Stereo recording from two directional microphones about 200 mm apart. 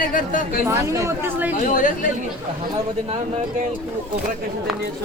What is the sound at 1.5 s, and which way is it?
Speech, 40° left (ahead or behind).